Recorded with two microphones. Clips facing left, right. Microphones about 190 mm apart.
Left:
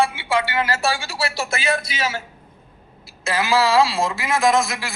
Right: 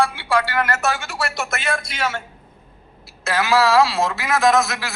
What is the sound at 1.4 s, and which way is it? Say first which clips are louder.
Speech: left 2 dB; 10° left (ahead or behind).